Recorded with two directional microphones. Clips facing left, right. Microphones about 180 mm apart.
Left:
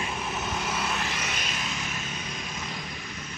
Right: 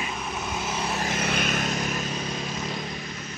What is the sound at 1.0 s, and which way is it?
Vehicle, 55° right (ahead or behind).